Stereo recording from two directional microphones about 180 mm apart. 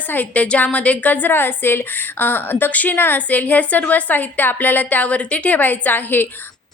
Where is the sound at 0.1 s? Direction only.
10° left (ahead or behind).